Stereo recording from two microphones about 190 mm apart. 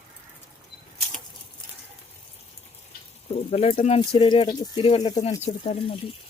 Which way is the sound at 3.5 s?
35° left (ahead or behind).